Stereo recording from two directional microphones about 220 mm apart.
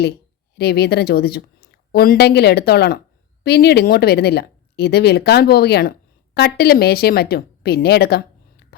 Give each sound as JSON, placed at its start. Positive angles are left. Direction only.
{"t": 0.0, "sound": "a woman's voice", "side_deg": 45}